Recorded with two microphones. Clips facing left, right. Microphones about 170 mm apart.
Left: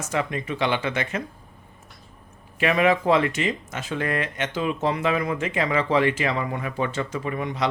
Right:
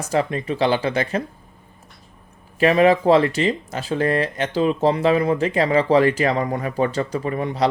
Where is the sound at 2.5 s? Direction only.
35° right (ahead or behind).